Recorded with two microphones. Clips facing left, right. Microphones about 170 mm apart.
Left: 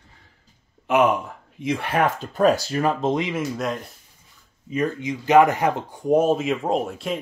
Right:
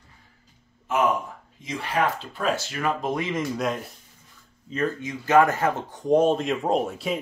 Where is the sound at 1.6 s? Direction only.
60° left (ahead or behind); by 3.3 s 20° left (ahead or behind).